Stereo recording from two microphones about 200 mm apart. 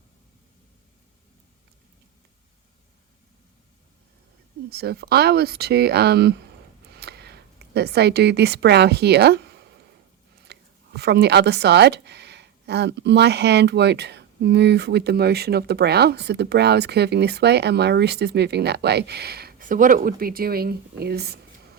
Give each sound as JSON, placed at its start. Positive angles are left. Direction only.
{"t": 4.7, "sound": "speech", "side_deg": -55}